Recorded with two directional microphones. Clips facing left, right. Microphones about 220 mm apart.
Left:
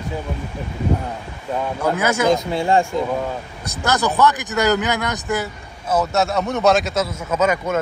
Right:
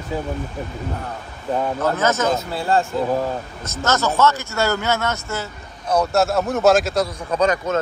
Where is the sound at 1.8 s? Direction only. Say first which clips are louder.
Left 3 dB; 15° left (ahead or behind).